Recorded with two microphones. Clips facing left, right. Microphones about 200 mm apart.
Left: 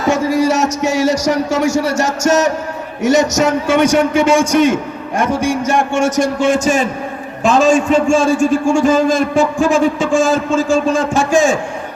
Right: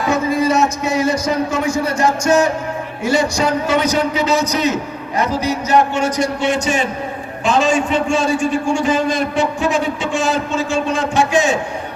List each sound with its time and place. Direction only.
0.1 s a man's voice: 80° left
3.1 s a man's voice: 45° left (ahead or behind)